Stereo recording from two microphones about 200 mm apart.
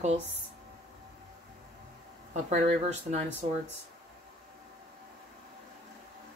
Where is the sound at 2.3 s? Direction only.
35° right (ahead or behind).